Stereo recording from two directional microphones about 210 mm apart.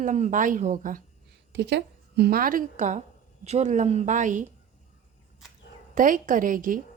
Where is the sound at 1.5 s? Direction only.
55° right (ahead or behind); by 4.5 s 35° right (ahead or behind).